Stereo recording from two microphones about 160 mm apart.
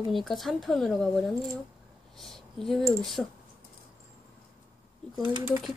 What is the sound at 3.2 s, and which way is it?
Speech, centre (ahead or behind).